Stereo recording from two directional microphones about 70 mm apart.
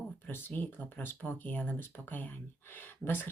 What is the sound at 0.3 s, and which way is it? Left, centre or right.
Speech, left.